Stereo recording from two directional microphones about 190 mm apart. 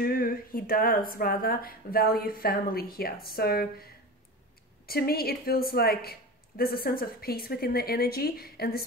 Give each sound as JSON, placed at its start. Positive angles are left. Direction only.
{"t": 0.0, "sound": "a woman's voice", "side_deg": 50}
{"t": 4.8, "sound": "a woman's voice", "side_deg": 55}